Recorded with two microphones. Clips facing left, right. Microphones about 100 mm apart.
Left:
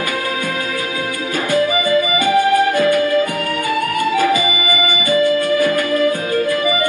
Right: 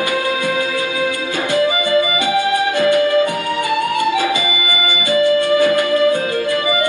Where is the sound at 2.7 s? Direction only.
30° right (ahead or behind).